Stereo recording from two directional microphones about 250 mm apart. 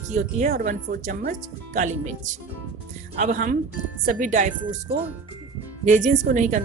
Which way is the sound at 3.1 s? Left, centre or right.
Right.